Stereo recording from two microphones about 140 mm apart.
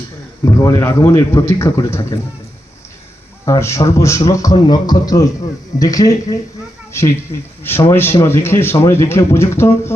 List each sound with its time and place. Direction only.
0.4 s a man's voice: 20° left (ahead or behind)
3.4 s a man's voice: 20° left (ahead or behind)